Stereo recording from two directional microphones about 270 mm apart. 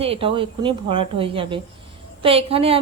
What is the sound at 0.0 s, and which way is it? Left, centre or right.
Speech, right.